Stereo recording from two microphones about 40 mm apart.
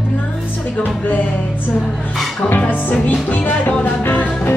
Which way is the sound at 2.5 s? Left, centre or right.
Left.